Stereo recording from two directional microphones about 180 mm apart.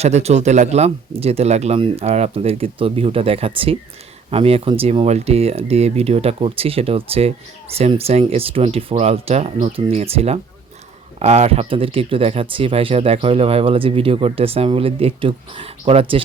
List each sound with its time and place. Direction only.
0.0 s speech: 35° right (ahead or behind)